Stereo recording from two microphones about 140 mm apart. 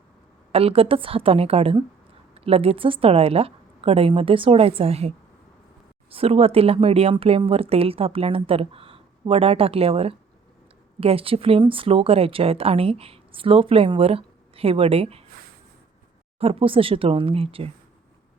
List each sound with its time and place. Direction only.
0.5 s a woman's voice: 45° right (ahead or behind)
16.4 s a woman's voice: 45° right (ahead or behind)